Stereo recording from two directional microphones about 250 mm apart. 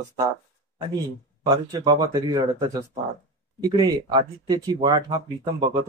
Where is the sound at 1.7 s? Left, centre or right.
Centre.